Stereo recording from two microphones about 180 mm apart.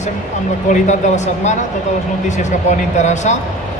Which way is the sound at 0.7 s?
40° left (ahead or behind).